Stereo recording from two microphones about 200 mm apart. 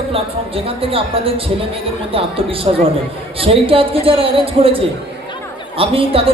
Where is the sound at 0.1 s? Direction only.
30° right (ahead or behind).